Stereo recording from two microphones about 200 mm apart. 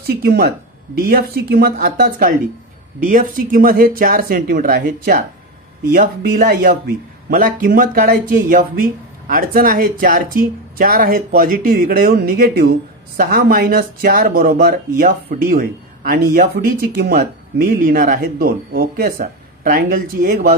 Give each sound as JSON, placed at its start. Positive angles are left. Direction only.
{"t": 0.0, "sound": "speech", "side_deg": -50}